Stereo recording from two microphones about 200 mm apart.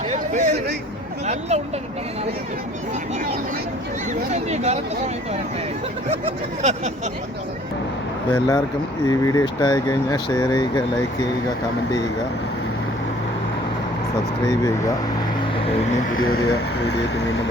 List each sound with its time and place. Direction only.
0.1 s a sound: 35° right (ahead or behind)
1.3 s speech: 35° right (ahead or behind)
4.3 s speech: 35° right (ahead or behind)
6.6 s speech: 35° right (ahead or behind)
8.3 s speech: 20° left (ahead or behind)
16.6 s speech: 60° left (ahead or behind)